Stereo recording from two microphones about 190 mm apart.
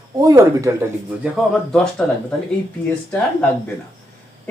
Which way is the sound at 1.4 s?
Centre (ahead or behind).